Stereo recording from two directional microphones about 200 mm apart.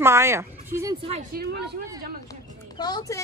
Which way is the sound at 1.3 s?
45° right (ahead or behind).